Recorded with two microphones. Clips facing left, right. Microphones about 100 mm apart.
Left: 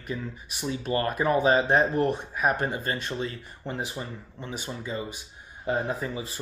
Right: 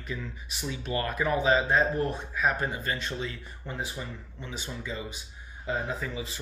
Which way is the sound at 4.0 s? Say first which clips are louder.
Left 2 dB; 35° left (ahead or behind).